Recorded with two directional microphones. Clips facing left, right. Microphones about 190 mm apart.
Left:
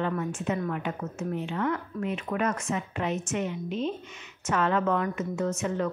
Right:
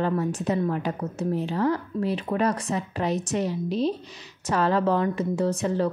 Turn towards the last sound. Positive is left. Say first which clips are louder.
# right 4 dB
turn(degrees=-35)  # may be behind; listen again after turning